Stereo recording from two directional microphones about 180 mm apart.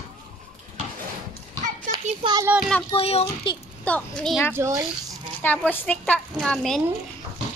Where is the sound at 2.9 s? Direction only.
35° left (ahead or behind).